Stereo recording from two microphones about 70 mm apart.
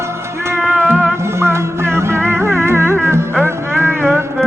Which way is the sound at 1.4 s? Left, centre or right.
Right.